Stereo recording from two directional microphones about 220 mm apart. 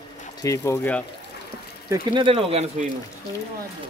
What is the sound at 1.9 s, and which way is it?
Speech, 20° right (ahead or behind).